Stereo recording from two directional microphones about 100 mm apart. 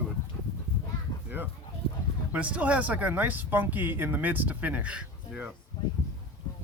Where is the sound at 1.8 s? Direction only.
75° left (ahead or behind).